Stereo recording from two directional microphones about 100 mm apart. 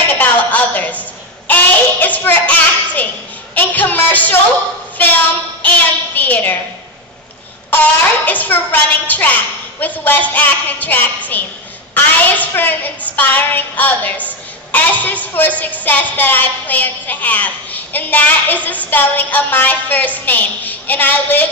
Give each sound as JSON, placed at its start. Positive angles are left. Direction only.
{"t": 0.2, "sound": "a sound", "side_deg": 15}
{"t": 1.5, "sound": "child singing", "side_deg": 15}
{"t": 3.5, "sound": "music", "side_deg": 20}
{"t": 5.0, "sound": "a woman's voice", "side_deg": 15}
{"t": 7.7, "sound": "a woman's voice", "side_deg": 15}